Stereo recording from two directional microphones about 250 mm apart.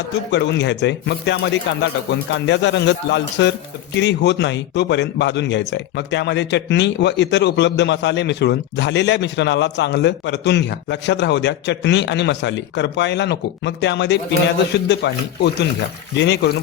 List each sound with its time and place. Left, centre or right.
0.3 s speech: left